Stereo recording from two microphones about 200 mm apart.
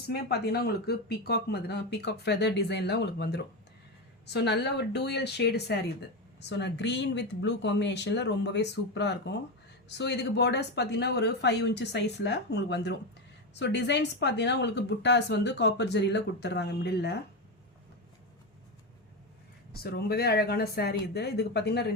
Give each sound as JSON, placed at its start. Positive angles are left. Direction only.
{"t": 0.1, "sound": "a woman's voice", "side_deg": 55}
{"t": 19.7, "sound": "a woman's voice", "side_deg": 50}